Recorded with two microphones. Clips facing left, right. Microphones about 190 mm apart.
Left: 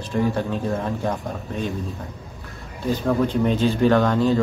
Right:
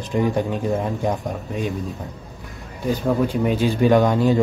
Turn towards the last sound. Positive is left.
turn(degrees=-15)  # may be behind; listen again after turning